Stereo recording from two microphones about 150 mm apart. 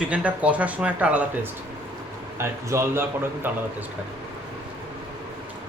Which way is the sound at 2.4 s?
20° right (ahead or behind).